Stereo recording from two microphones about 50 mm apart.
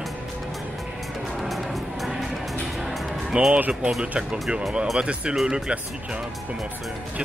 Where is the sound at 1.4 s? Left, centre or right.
Centre.